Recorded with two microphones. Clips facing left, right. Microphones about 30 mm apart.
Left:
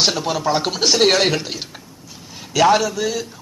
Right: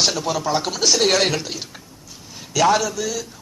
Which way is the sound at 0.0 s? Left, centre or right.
Left.